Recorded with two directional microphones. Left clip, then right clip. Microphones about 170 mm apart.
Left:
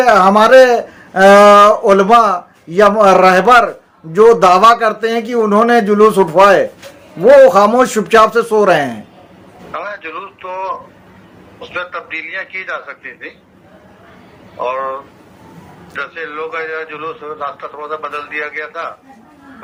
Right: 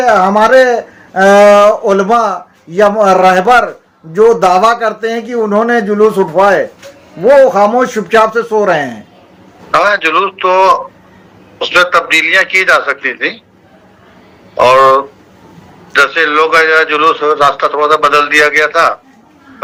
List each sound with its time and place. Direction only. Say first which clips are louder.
0.0 s speech: even; 10° left (ahead or behind)
9.7 s a man's voice: right 15 dB; 55° right (ahead or behind)
14.6 s a man's voice: right 14 dB; 55° right (ahead or behind)